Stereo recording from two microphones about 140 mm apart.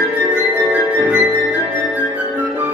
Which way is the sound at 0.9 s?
15° right (ahead or behind).